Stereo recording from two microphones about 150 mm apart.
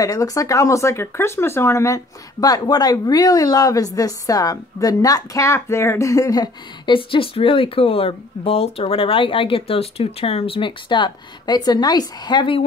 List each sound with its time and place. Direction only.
0.0 s a woman's voice: 20° left (ahead or behind)